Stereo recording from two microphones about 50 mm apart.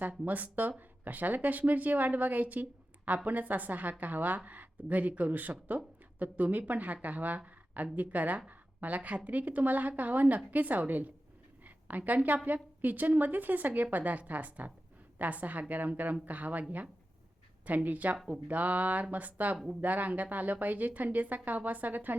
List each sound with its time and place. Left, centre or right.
0.3 s a woman's voice: right
11.6 s a sound: right
12.8 s a woman's voice: right